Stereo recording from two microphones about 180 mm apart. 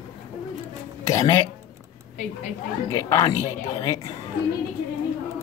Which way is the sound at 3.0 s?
20° left (ahead or behind).